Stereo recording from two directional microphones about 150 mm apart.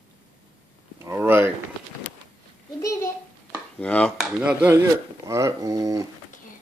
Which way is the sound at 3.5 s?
10° left (ahead or behind).